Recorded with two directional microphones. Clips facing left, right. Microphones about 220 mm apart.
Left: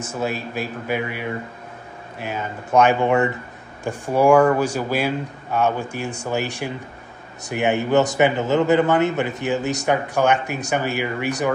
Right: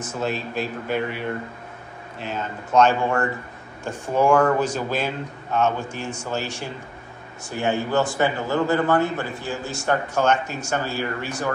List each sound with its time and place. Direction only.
0.0 s a man's voice: 10° left (ahead or behind)